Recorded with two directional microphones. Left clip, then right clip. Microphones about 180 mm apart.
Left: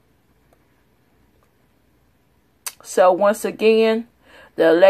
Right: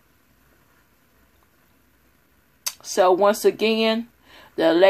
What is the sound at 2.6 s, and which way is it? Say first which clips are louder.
Speech: left 4 dB; 25° left (ahead or behind).